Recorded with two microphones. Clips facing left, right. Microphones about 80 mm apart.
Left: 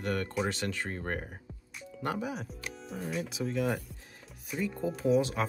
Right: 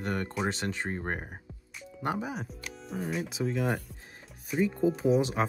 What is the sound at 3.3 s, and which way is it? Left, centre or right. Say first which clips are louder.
Speech: even; right.